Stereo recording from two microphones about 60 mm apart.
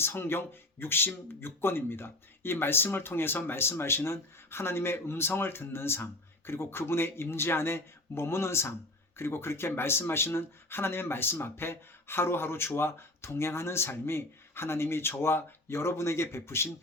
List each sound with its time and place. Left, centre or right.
0.0 s speech: left